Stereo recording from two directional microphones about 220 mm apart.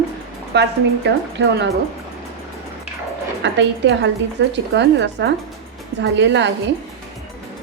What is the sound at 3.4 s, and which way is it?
A woman's voice, 55° right (ahead or behind).